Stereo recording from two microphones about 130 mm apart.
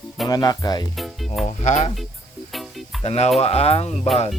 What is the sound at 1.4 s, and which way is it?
Speech, 60° left (ahead or behind).